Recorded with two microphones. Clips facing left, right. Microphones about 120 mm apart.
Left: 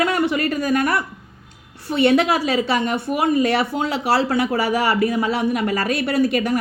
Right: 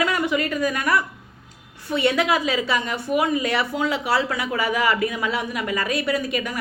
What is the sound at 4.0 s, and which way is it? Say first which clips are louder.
Speech: left 7 dB; 65° left (ahead or behind).